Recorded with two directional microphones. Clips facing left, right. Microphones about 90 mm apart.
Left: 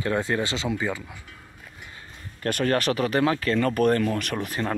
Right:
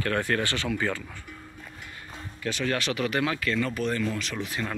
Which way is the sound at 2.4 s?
50° left (ahead or behind).